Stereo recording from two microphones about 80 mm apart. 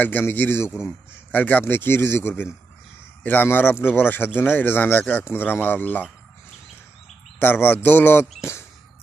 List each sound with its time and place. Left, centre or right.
0.0 s speech: left
7.3 s speech: left